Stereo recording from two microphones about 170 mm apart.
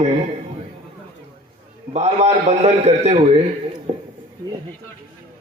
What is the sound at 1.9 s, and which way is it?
A man's voice, 40° right (ahead or behind).